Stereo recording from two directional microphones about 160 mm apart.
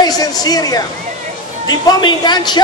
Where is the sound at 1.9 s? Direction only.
25° left (ahead or behind).